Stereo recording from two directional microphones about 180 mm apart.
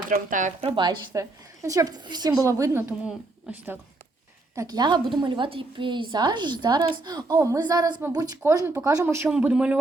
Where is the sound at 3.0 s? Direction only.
5° right (ahead or behind).